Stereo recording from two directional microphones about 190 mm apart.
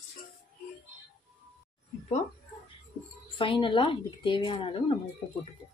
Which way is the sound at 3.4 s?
25° left (ahead or behind).